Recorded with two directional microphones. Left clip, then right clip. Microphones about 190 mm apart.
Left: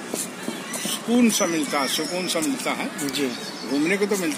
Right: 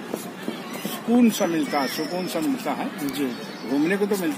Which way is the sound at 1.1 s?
20° right (ahead or behind).